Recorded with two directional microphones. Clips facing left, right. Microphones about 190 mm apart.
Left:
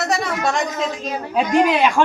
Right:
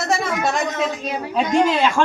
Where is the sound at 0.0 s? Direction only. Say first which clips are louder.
Even; centre (ahead or behind).